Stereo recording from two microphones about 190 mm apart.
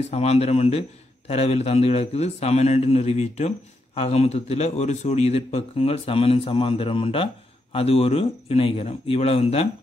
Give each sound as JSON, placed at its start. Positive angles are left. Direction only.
{"t": 0.0, "sound": "a man's voice", "side_deg": 35}